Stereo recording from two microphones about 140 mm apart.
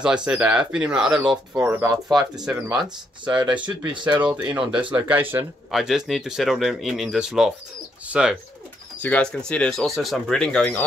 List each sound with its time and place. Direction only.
0.0 s speech: 5° right (ahead or behind)
2.8 s speech: 30° right (ahead or behind)
4.3 s speech: 10° right (ahead or behind)
5.7 s speech: centre (ahead or behind)
9.0 s speech: 10° left (ahead or behind)